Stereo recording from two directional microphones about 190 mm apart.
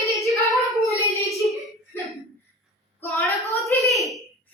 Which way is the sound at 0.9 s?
15° left (ahead or behind).